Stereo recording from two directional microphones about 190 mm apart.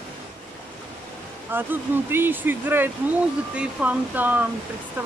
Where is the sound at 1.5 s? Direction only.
10° right (ahead or behind).